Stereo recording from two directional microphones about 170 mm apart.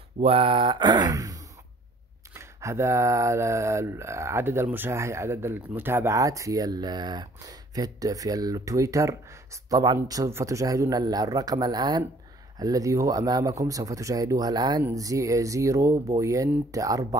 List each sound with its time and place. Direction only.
0.2 s speech: 30° right (ahead or behind)